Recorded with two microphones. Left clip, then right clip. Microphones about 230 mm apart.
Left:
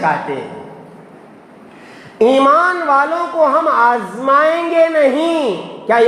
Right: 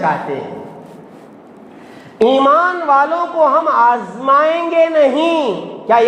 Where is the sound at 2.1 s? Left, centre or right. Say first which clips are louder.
Even; left.